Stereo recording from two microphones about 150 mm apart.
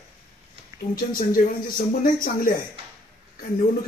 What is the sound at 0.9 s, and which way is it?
Speech, 75° left (ahead or behind).